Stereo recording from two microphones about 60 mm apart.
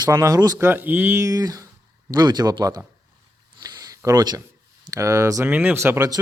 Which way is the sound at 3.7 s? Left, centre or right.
Right.